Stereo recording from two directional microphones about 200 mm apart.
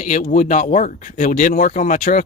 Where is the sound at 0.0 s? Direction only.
40° left (ahead or behind).